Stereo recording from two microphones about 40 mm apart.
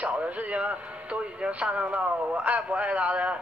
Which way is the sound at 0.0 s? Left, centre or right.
Right.